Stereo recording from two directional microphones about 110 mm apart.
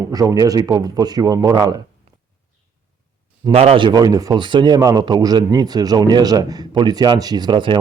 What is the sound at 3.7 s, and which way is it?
Speech, 40° right (ahead or behind).